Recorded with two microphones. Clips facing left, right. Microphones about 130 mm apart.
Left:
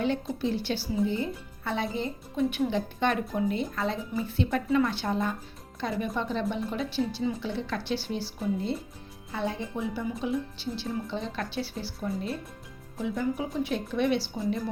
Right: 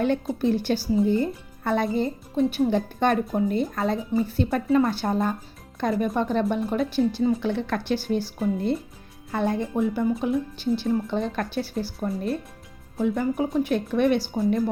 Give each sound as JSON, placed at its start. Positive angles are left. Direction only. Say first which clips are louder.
{"t": 0.0, "sound": "speech", "louder": "right 5 dB", "side_deg": -50}
{"t": 13.0, "sound": "speech", "louder": "right 6 dB", "side_deg": -55}